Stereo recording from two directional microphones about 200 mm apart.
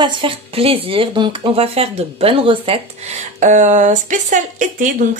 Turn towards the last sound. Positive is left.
turn(degrees=-40)  # may be behind; listen again after turning